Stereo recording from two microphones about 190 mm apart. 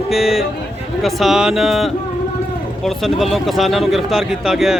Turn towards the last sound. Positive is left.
turn(degrees=0)  # may be behind; listen again after turning